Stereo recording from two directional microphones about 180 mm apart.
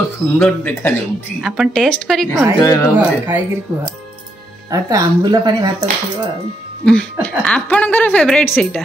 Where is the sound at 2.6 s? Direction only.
15° left (ahead or behind).